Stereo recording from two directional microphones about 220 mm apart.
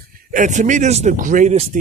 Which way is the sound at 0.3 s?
35° right (ahead or behind).